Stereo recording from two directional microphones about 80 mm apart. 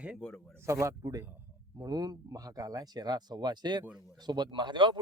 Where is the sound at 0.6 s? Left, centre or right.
Right.